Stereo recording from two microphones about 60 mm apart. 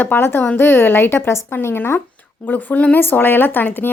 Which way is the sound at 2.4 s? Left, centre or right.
Left.